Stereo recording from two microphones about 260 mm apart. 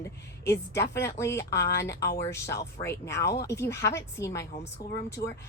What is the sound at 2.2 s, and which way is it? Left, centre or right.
A woman's voice, centre.